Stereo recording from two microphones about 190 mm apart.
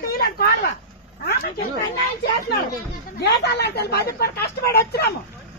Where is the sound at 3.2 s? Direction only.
60° left (ahead or behind).